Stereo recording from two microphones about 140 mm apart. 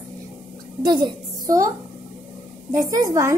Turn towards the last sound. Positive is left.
turn(degrees=-20)  # may be behind; listen again after turning